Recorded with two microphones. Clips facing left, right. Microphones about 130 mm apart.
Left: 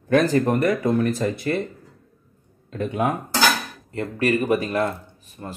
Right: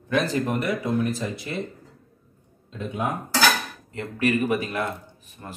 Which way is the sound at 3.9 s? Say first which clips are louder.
Left 2 dB; 35° left (ahead or behind).